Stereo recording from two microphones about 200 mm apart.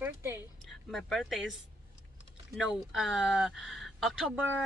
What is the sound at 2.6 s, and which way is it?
Speech, 5° right (ahead or behind).